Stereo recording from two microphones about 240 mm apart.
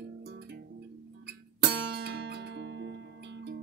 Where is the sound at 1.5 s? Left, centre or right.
Right.